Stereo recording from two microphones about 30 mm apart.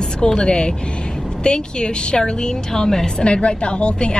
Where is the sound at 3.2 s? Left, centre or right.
Left.